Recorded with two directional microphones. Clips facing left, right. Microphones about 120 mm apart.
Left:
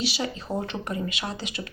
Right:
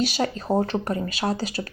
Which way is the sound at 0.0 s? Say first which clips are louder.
Right 5 dB; 45° right (ahead or behind).